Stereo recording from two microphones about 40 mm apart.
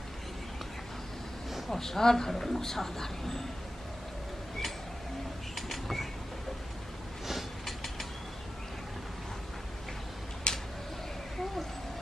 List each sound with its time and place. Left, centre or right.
1.7 s speech: centre
5.7 s train: centre
7.2 s mechanisms: centre
10.5 s a sound: left